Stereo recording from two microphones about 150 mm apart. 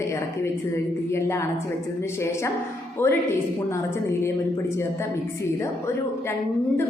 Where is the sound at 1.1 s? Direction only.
20° left (ahead or behind).